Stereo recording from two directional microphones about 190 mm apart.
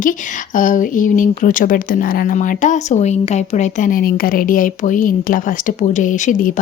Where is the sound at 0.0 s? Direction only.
45° left (ahead or behind).